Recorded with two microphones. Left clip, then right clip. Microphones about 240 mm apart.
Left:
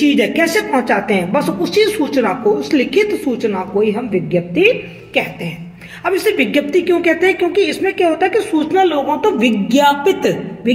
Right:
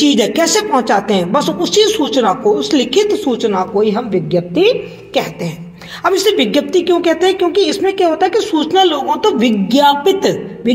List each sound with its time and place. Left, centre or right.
0.0 s a woman's voice: right